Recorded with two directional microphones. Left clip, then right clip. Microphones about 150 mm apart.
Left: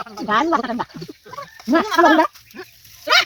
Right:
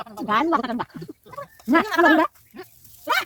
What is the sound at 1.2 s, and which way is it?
Bleat, 20° right (ahead or behind).